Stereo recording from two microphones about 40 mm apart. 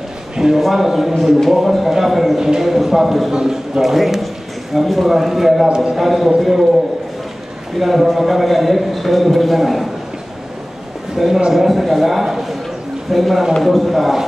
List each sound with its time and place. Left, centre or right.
0.6 s a man's voice: centre
3.3 s a man's voice: centre
3.8 s a man's voice: centre
7.8 s a man's voice: centre
11.1 s a man's voice: centre